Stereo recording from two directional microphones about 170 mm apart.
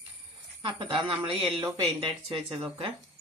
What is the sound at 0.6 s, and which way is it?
Speech, 30° right (ahead or behind).